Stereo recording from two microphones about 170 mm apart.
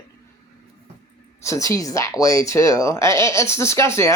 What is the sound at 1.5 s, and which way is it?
Speech, 20° left (ahead or behind).